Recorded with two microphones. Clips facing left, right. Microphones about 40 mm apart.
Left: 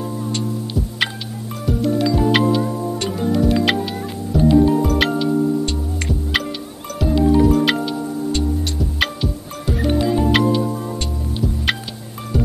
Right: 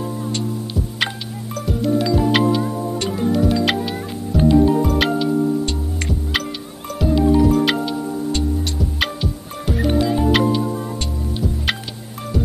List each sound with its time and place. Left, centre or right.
0.0 s music: centre